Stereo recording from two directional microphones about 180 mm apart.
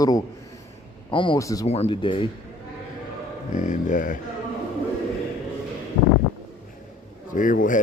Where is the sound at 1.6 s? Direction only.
35° left (ahead or behind).